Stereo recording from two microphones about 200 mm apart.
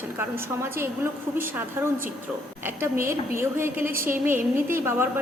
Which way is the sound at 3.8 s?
45° right (ahead or behind).